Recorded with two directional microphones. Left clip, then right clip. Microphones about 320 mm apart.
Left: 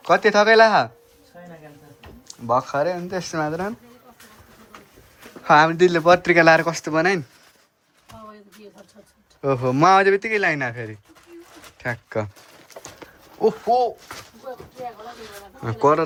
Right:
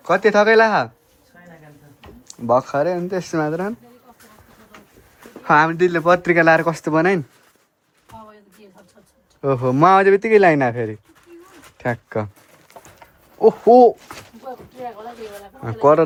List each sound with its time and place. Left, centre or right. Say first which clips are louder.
0.0 s speech: right 1 dB; centre
2.2 s speech: right 4 dB; centre
5.4 s speech: even; centre
9.4 s speech: right 2 dB; centre
13.4 s speech: right 6 dB; centre
14.5 s a sound: right 2 dB; right
15.6 s speech: right 4 dB; centre